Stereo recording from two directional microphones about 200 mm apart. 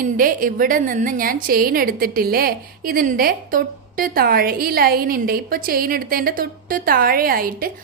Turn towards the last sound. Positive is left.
turn(degrees=-45)  # may be behind; listen again after turning